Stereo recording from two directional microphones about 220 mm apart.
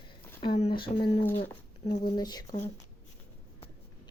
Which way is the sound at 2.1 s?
20° left (ahead or behind).